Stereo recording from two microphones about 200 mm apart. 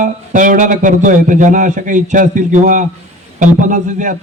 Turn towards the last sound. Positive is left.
turn(degrees=-40)  # may be behind; listen again after turning